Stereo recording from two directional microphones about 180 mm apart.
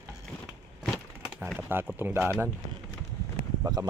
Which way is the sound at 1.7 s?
10° right (ahead or behind).